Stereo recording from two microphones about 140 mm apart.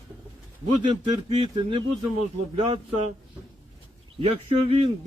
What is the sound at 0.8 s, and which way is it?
Speech, 35° right (ahead or behind).